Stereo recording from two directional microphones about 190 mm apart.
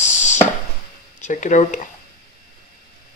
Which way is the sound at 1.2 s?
40° left (ahead or behind).